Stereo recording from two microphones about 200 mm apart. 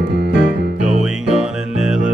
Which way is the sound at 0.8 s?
5° right (ahead or behind).